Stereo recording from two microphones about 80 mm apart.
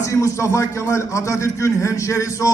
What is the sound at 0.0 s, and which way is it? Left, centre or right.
A man's voice, left.